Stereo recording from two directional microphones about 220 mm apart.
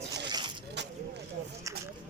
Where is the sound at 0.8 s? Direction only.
50° right (ahead or behind).